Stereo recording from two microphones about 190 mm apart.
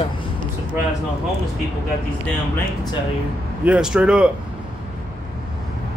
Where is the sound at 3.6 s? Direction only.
5° right (ahead or behind).